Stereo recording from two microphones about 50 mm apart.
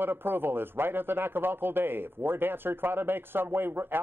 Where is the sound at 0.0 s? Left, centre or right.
Right.